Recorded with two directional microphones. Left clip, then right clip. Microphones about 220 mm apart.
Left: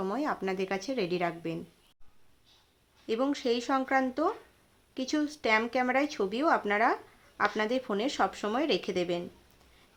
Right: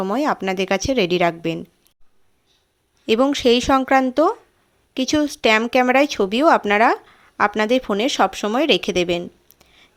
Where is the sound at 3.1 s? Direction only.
40° right (ahead or behind).